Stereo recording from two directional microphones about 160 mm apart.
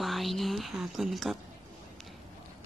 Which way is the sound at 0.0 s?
Centre (ahead or behind).